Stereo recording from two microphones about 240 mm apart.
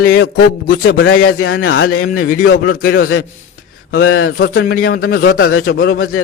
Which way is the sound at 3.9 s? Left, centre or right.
Left.